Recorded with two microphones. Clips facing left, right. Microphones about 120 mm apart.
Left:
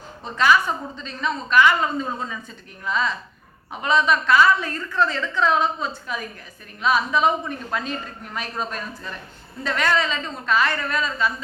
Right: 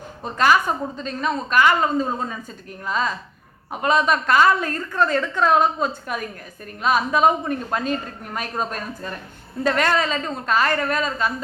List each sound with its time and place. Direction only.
0.3 s a woman's voice: 45° right (ahead or behind)